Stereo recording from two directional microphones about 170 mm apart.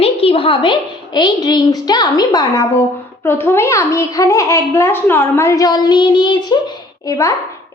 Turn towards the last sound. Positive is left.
turn(degrees=20)  # may be behind; listen again after turning